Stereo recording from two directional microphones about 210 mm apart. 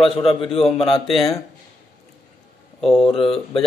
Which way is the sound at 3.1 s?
25° left (ahead or behind).